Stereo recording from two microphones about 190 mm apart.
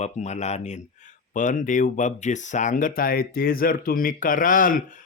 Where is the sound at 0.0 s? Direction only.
35° left (ahead or behind).